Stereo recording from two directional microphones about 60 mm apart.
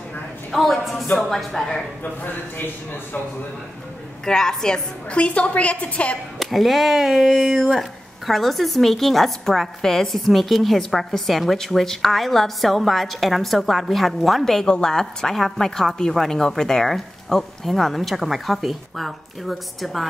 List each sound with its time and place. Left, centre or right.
0.5 s a woman's voice: centre
2.2 s a man's voice: left
4.3 s a woman's voice: centre
5.1 s a woman's voice: left
6.4 s a woman's voice: centre